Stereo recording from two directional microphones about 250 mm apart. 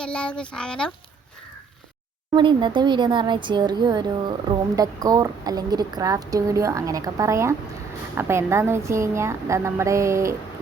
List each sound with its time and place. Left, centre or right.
0.0 s speech: centre
2.3 s speech: centre